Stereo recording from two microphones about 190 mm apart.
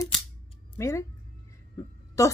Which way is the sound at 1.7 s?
15° left (ahead or behind).